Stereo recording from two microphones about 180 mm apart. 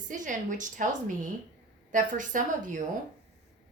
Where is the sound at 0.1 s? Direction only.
45° right (ahead or behind).